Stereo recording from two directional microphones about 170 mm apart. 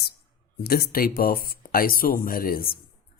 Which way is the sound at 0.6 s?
65° left (ahead or behind).